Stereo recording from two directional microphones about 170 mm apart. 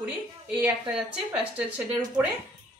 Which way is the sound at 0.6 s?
10° right (ahead or behind).